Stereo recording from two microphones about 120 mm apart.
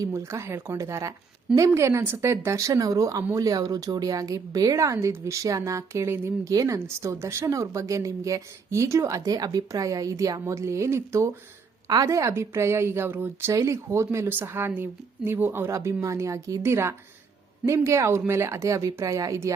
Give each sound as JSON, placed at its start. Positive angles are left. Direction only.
{"t": 0.0, "sound": "speech", "side_deg": -25}